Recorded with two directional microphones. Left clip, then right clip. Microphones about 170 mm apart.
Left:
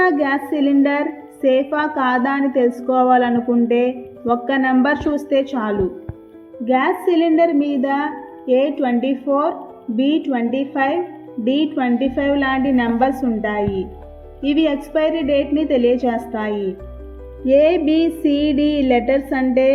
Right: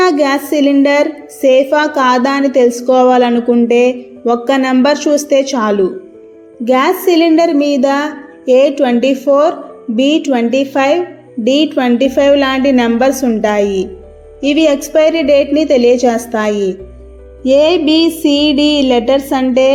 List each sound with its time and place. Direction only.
0.0 s speech: 25° right (ahead or behind)
6.7 s a woman's voice: 30° right (ahead or behind)
17.4 s a sound: 45° right (ahead or behind)